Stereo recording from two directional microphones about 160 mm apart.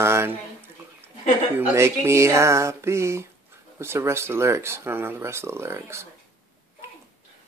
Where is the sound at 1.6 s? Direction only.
15° right (ahead or behind).